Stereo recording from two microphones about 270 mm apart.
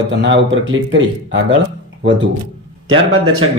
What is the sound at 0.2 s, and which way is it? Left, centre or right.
Speech, right.